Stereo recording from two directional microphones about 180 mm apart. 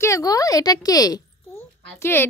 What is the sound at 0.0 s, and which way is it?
A child's voice, 20° left (ahead or behind).